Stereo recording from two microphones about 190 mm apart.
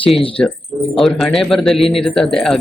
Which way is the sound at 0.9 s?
Centre (ahead or behind).